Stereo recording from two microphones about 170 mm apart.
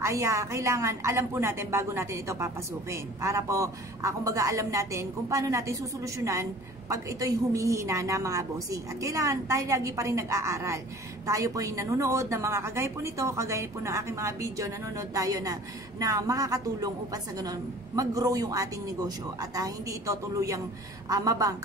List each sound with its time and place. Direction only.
0.0 s a woman's voice: 15° right (ahead or behind)